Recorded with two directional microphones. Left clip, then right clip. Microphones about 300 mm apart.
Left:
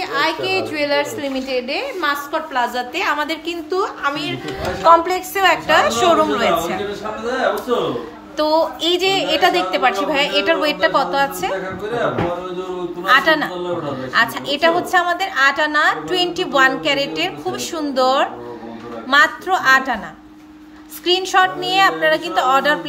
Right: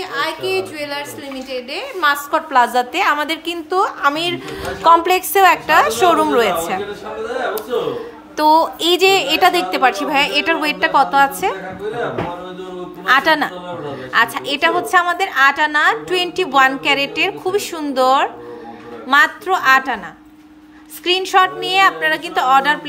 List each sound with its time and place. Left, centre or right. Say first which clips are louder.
0.0 s a woman's voice: left 2 dB; centre
8.4 s a woman's voice: right 4 dB; centre
13.0 s a woman's voice: right 1 dB; centre
21.0 s a woman's voice: right 1 dB; centre